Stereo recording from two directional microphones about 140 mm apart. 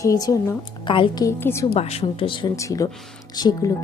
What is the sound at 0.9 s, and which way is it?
Speech, 40° left (ahead or behind).